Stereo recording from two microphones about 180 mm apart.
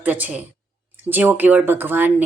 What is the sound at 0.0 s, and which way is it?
A woman's voice, 10° right (ahead or behind).